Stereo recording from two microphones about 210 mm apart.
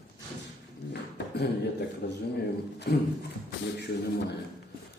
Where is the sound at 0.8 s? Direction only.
55° left (ahead or behind).